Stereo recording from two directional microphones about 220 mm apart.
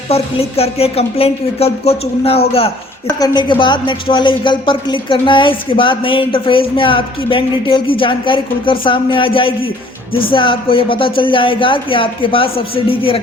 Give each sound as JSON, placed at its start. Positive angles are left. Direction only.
{"t": 0.1, "sound": "a woman's voice", "side_deg": 25}